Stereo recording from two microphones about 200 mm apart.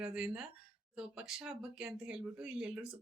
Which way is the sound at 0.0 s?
5° right (ahead or behind).